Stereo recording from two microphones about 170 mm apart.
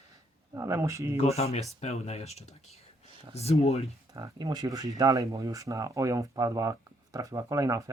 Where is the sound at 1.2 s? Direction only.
40° left (ahead or behind).